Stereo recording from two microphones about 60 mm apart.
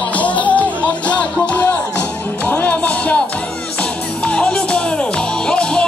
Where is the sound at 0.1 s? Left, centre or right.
Left.